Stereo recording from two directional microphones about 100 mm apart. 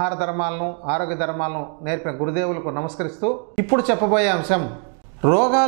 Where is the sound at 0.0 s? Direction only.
15° right (ahead or behind).